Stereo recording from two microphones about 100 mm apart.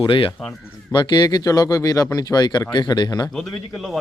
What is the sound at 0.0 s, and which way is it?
Speech, 60° left (ahead or behind).